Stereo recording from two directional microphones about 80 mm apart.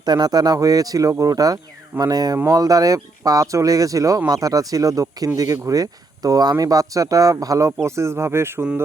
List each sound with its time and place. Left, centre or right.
0.0 s speech: right
2.0 s a sound: right
2.5 s speech: right
7.9 s speech: right